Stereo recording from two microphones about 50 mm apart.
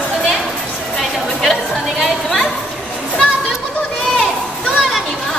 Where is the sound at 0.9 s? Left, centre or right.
Centre.